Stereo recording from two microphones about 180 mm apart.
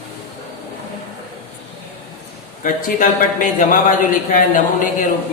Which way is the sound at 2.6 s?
45° left (ahead or behind).